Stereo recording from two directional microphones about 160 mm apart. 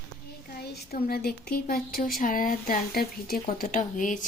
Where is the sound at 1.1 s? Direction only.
70° left (ahead or behind).